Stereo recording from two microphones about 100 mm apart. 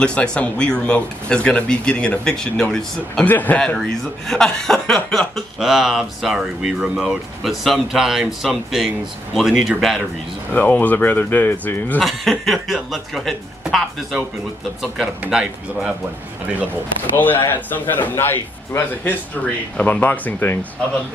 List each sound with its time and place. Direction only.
0.0 s speech: 10° left (ahead or behind)
3.3 s speech: 15° left (ahead or behind); by 10.0 s centre (ahead or behind)
10.5 s a man's voice: 20° left (ahead or behind)
12.0 s speech: centre (ahead or behind)
15.2 s speech: 5° right (ahead or behind)
17.1 s a man's voice: 20° left (ahead or behind)